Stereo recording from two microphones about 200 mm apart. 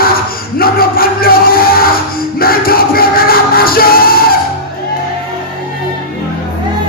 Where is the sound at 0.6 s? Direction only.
50° left (ahead or behind).